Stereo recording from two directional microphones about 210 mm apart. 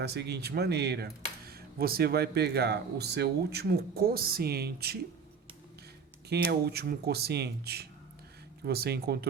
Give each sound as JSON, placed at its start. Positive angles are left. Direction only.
{"t": 0.0, "sound": "speech", "side_deg": -50}
{"t": 6.2, "sound": "speech", "side_deg": -50}